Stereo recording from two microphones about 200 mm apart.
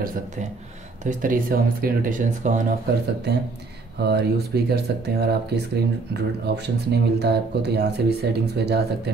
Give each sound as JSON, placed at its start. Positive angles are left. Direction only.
{"t": 1.0, "sound": "speech", "side_deg": -40}
{"t": 3.3, "sound": "speech", "side_deg": -55}